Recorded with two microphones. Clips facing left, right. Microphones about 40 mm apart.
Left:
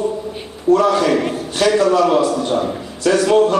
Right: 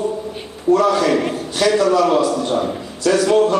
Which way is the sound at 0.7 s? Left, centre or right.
Centre.